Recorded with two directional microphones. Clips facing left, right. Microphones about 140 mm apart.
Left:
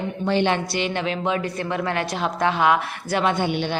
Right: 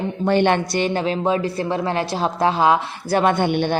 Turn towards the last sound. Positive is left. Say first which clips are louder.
# right 4 dB
turn(degrees=-50)  # may be behind; listen again after turning